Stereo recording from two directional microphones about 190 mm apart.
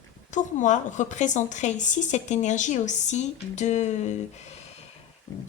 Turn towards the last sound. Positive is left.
turn(degrees=40)  # may be behind; listen again after turning